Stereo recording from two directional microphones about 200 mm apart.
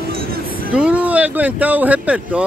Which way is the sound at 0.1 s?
50° right (ahead or behind).